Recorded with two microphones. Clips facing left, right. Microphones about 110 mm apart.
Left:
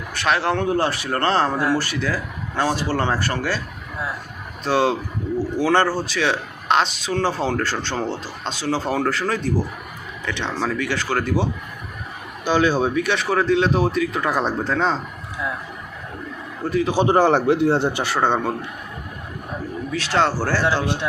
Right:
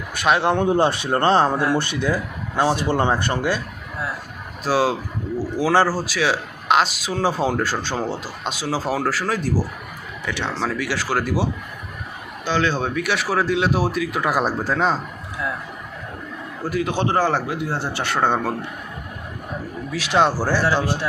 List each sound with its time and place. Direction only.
0.1 s speech: 15° right (ahead or behind)
4.6 s speech: 5° right (ahead or behind)
12.5 s a man's voice: 15° left (ahead or behind)
13.1 s speech: 5° right (ahead or behind)
16.6 s speech: 5° right (ahead or behind)
16.9 s a man's voice: 15° left (ahead or behind)
18.0 s speech: centre (ahead or behind)
19.9 s speech: 15° right (ahead or behind)